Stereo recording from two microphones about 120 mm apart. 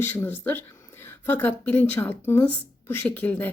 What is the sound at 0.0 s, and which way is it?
Speech, 15° left (ahead or behind).